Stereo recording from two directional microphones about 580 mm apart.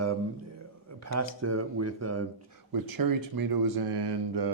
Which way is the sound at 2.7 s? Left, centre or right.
Right.